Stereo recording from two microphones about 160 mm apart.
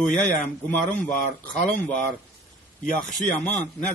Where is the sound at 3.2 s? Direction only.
10° left (ahead or behind).